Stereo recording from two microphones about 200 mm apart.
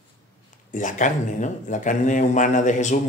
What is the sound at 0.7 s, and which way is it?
Speech, 40° left (ahead or behind).